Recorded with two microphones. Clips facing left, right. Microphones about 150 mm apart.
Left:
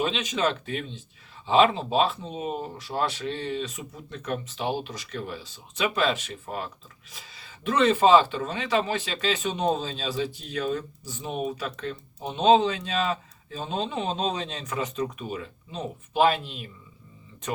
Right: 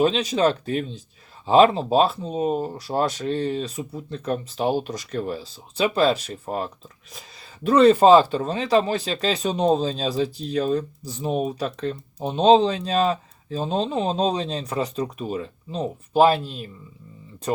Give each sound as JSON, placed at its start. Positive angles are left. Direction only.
{"t": 0.0, "sound": "a man's voice", "side_deg": -35}